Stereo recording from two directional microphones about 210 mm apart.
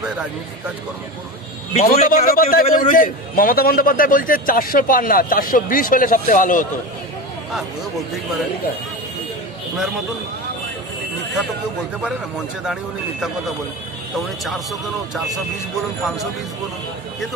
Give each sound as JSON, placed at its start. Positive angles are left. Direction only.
{"t": 1.7, "sound": "a man's voice", "side_deg": 35}
{"t": 12.0, "sound": "speech", "side_deg": 0}
{"t": 14.1, "sound": "speech", "side_deg": 0}